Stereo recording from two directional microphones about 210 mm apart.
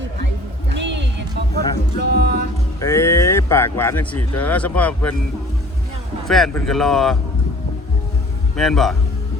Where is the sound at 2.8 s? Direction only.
10° left (ahead or behind).